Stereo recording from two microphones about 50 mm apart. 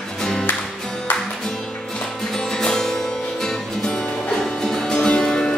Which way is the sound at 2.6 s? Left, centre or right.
Centre.